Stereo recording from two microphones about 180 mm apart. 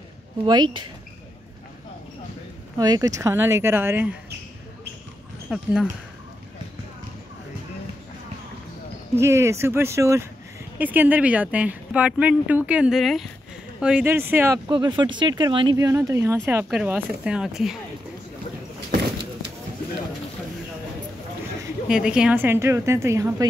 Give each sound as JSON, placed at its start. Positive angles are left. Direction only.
{"t": 0.5, "sound": "speech", "side_deg": -25}
{"t": 2.8, "sound": "speech", "side_deg": -20}
{"t": 5.5, "sound": "speech", "side_deg": -5}
{"t": 9.1, "sound": "speech", "side_deg": -15}
{"t": 14.7, "sound": "speech", "side_deg": -25}
{"t": 21.8, "sound": "speech", "side_deg": -5}